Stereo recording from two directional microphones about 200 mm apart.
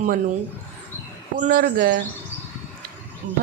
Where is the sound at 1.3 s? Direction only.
40° right (ahead or behind).